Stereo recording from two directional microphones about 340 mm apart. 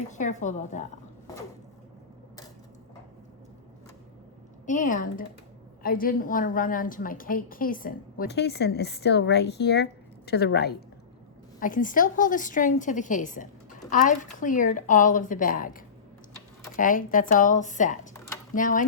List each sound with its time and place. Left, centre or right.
0.1 s a woman's voice: left
4.6 s a woman's voice: left